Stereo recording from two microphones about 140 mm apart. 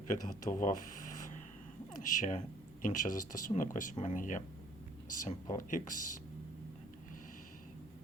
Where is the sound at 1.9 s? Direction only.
60° left (ahead or behind).